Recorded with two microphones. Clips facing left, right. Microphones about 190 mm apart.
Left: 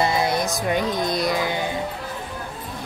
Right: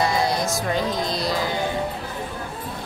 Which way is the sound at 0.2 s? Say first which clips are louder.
Even; 20° left (ahead or behind).